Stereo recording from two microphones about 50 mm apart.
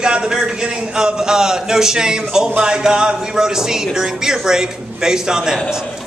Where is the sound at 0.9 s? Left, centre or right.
Centre.